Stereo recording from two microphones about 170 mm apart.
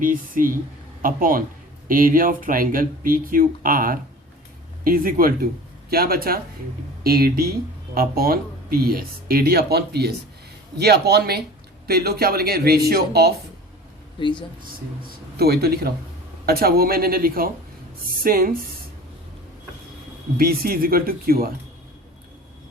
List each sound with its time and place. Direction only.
0.0 s speech: 55° right (ahead or behind); by 13.3 s 70° right (ahead or behind)
14.2 s speech: 25° left (ahead or behind)
14.6 s speech: 65° right (ahead or behind)
20.4 s speech: 60° right (ahead or behind)